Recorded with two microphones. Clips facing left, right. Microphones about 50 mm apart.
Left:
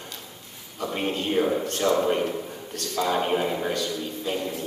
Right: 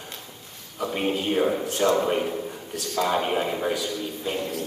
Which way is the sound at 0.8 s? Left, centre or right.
Centre.